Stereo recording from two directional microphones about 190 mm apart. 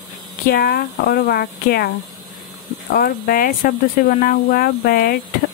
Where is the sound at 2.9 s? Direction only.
50° left (ahead or behind).